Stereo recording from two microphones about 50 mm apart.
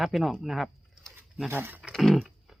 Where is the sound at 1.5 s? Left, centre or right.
Right.